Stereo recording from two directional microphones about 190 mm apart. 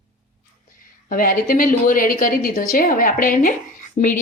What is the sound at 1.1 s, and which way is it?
A woman's voice, 45° left (ahead or behind).